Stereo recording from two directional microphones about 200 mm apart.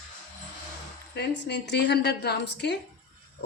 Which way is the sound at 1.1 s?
55° left (ahead or behind).